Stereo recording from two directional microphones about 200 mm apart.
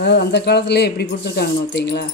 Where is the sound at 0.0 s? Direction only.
55° left (ahead or behind).